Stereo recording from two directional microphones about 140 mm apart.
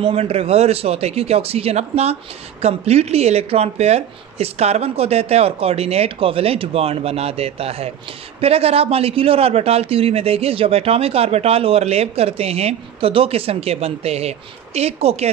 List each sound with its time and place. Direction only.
0.0 s a man's voice: 45° right (ahead or behind)